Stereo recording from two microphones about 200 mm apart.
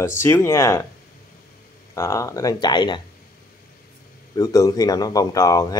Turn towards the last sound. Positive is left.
turn(degrees=15)  # may be behind; listen again after turning